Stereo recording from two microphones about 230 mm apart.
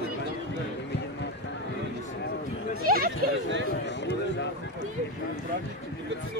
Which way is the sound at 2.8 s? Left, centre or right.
Right.